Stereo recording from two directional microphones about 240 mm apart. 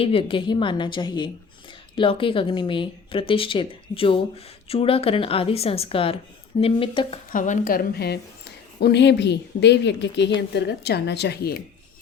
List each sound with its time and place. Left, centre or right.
0.0 s speech: left
7.3 s a woman's voice: left